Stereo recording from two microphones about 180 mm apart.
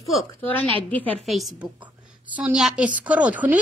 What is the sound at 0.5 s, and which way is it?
A woman's voice, 10° left (ahead or behind).